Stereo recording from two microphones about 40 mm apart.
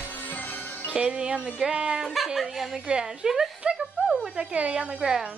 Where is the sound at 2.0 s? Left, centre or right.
Centre.